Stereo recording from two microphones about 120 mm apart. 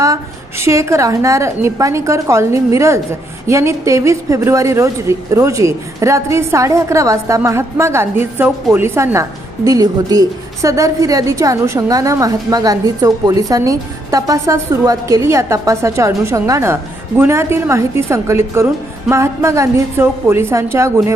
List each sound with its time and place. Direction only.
0.6 s a woman's voice: 25° right (ahead or behind)